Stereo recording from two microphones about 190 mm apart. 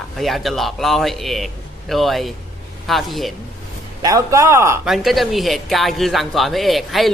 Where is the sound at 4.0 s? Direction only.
20° right (ahead or behind).